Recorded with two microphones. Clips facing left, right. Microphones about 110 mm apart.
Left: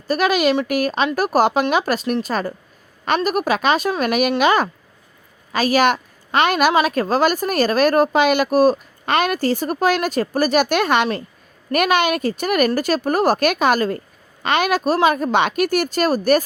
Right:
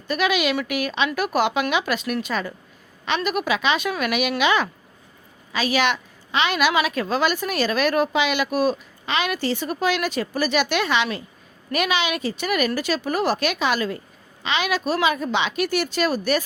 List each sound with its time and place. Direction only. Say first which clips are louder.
0.1 s a woman's voice: left 5 dB; 40° left (ahead or behind)